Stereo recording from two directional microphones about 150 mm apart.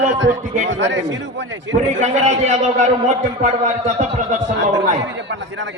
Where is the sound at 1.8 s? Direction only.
55° right (ahead or behind).